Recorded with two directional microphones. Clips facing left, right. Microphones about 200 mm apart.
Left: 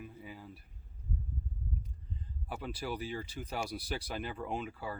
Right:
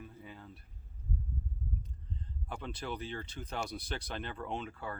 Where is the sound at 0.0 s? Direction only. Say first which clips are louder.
Left 2 dB; 10° left (ahead or behind).